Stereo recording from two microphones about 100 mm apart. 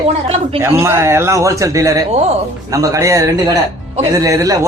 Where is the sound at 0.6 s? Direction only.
25° right (ahead or behind).